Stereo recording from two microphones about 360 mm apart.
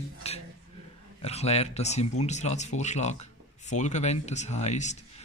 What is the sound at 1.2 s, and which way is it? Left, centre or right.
A man's voice, centre.